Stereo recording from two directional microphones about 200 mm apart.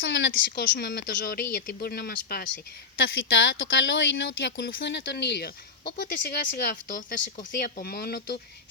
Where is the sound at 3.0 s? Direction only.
70° left (ahead or behind); by 6.7 s 55° left (ahead or behind).